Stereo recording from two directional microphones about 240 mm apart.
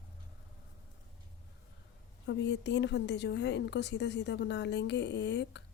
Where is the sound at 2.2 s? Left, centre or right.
Left.